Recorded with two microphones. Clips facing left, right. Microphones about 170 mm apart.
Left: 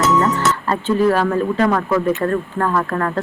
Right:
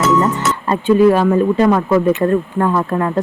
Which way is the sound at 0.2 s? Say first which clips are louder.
Right 1 dB; 15° right (ahead or behind).